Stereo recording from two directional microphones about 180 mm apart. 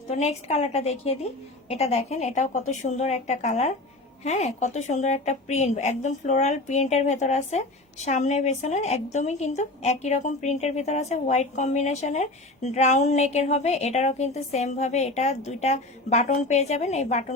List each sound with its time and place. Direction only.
0.1 s a woman's voice: 35° left (ahead or behind)